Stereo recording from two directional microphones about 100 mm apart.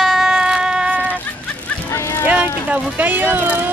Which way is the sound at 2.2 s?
15° right (ahead or behind).